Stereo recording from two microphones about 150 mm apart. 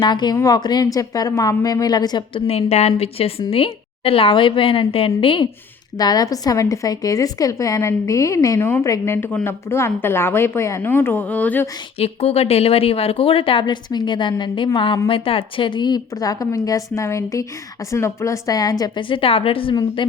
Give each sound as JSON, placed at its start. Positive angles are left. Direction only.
{"t": 0.0, "sound": "a woman's voice", "side_deg": 30}
{"t": 11.9, "sound": "a woman's voice", "side_deg": 40}